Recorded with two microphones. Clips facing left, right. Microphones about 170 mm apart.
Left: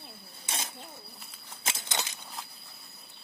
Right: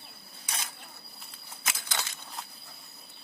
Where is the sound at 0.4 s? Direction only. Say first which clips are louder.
Left 2 dB; 25° left (ahead or behind).